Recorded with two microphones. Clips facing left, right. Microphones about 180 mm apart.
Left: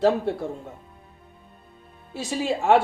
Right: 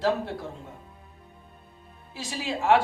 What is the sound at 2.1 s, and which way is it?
Speech, 55° left (ahead or behind).